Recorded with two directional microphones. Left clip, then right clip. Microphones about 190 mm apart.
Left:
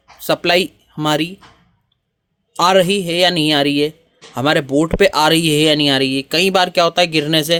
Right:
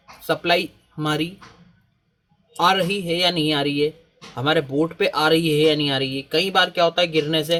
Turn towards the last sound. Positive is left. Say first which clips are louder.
# left 5 dB
turn(degrees=60)  # may be behind; listen again after turning